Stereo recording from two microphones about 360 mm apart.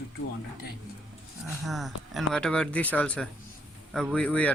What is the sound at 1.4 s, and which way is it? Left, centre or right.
Speech, centre.